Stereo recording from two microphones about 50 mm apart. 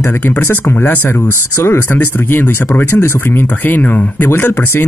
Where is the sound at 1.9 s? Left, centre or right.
Left.